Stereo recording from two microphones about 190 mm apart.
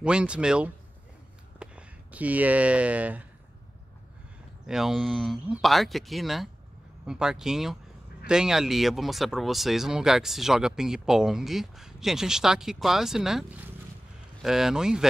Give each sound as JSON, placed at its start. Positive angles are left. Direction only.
{"t": 0.0, "sound": "speech", "side_deg": -5}
{"t": 4.6, "sound": "speech", "side_deg": -5}